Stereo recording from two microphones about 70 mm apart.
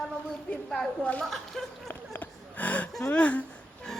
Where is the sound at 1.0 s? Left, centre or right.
Centre.